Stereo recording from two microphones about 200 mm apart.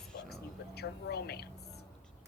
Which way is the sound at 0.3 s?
55° left (ahead or behind).